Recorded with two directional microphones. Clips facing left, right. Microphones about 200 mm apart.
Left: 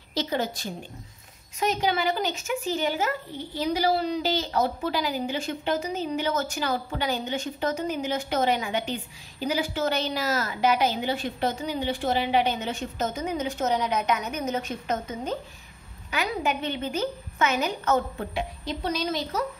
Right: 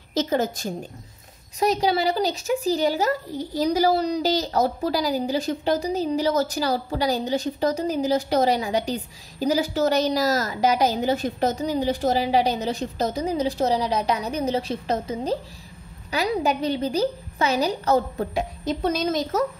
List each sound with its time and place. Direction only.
0.1 s a woman's voice: 45° right (ahead or behind)